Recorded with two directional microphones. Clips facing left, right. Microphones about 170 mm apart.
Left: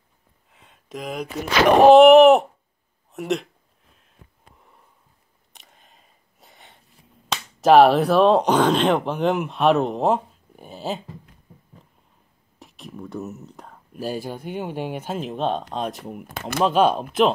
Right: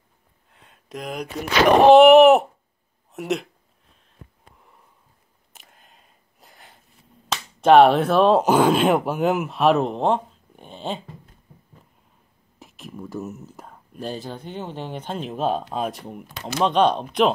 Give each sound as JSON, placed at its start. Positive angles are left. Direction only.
{"t": 0.5, "sound": "a sound", "side_deg": 0}
{"t": 1.9, "sound": "speech", "side_deg": 0}
{"t": 5.5, "sound": "a sound", "side_deg": 0}
{"t": 7.2, "sound": "speech", "side_deg": 0}
{"t": 12.5, "sound": "whispering", "side_deg": 0}
{"t": 13.9, "sound": "speech", "side_deg": 10}
{"t": 16.3, "sound": "speech", "side_deg": 55}
{"t": 16.6, "sound": "speech", "side_deg": 5}